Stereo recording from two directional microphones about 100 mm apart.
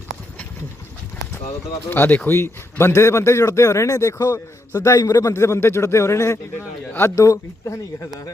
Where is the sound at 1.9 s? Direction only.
20° left (ahead or behind).